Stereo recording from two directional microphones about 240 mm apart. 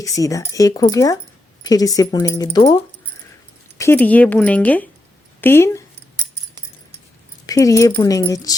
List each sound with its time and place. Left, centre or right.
0.0 s speech: centre
3.8 s speech: centre
7.4 s speech: centre